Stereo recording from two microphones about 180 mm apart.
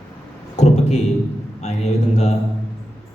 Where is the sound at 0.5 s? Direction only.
40° left (ahead or behind).